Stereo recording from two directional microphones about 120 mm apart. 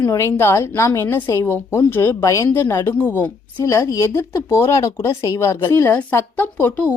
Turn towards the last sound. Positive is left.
turn(degrees=15)  # may be behind; listen again after turning